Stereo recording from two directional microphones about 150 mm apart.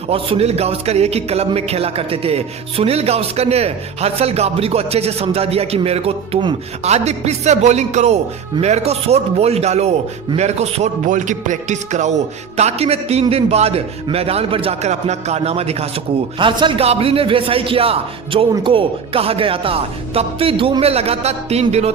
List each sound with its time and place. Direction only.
0.1 s a man's voice: 40° right (ahead or behind)